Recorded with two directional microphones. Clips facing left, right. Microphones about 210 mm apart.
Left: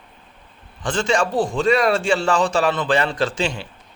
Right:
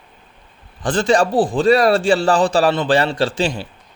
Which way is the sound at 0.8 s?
35° right (ahead or behind).